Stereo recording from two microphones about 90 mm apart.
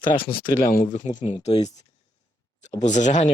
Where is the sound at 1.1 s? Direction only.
85° left.